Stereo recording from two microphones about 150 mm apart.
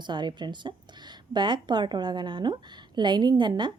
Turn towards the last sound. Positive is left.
turn(degrees=-30)  # may be behind; listen again after turning